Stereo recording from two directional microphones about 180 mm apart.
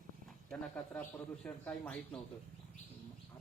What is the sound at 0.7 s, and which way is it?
A man's voice, 10° left (ahead or behind).